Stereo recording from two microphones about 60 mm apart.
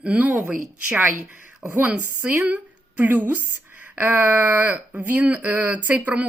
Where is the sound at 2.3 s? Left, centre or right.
Right.